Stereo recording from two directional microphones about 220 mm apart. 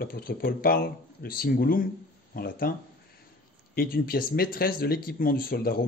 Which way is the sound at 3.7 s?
40° left (ahead or behind).